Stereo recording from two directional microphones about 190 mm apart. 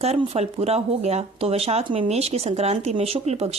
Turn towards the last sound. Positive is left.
turn(degrees=-35)  # may be behind; listen again after turning